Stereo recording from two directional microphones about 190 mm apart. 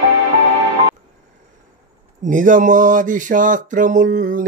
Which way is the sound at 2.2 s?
45° right (ahead or behind).